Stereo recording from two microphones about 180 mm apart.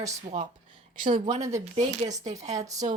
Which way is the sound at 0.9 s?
45° right (ahead or behind).